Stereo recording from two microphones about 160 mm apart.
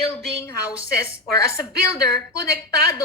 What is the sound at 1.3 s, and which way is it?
Speech, 20° left (ahead or behind).